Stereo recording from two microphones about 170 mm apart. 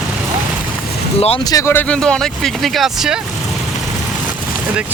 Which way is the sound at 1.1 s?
35° left (ahead or behind).